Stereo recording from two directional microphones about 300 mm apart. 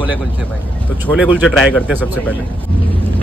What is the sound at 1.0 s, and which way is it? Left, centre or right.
Speech, centre.